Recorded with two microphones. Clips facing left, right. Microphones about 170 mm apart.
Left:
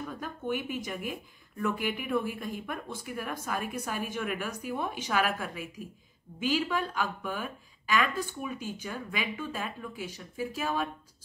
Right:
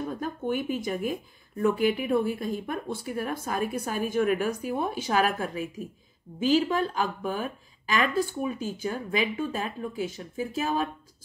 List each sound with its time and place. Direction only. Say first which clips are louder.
0.0 s speech: right 6 dB; 35° right (ahead or behind)